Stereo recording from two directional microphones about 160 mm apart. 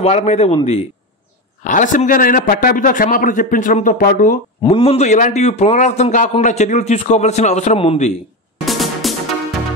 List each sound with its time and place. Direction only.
0.0 s speech: 40° left (ahead or behind)
1.6 s a man's voice: 55° left (ahead or behind)
4.7 s a man's voice: 40° left (ahead or behind)
8.6 s music: centre (ahead or behind)